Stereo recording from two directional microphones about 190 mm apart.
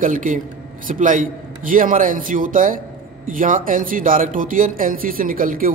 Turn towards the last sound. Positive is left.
turn(degrees=-45)  # may be behind; listen again after turning